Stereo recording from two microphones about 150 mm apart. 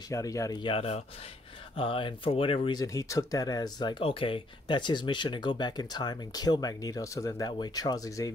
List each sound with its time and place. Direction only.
0.1 s speech: 20° left (ahead or behind)